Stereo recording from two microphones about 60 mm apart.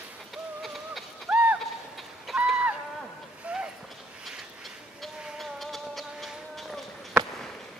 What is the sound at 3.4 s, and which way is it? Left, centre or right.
Clip-clop, centre.